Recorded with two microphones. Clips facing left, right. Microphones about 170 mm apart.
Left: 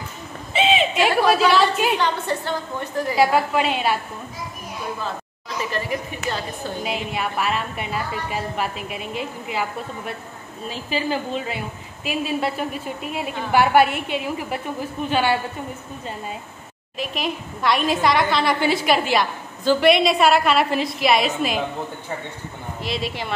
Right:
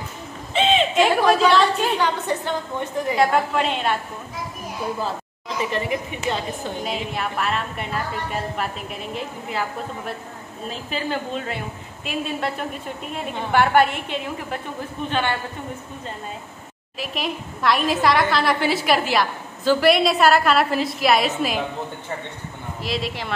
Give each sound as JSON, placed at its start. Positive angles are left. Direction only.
{"t": 0.5, "sound": "owl", "side_deg": 5}
{"t": 2.0, "sound": "a woman's voice", "side_deg": -15}
{"t": 3.2, "sound": "a woman's voice", "side_deg": 10}
{"t": 5.7, "sound": "speech", "side_deg": -25}
{"t": 6.8, "sound": "a woman's voice", "side_deg": 5}
{"t": 17.0, "sound": "a woman's voice", "side_deg": 0}
{"t": 22.8, "sound": "a woman's voice", "side_deg": 0}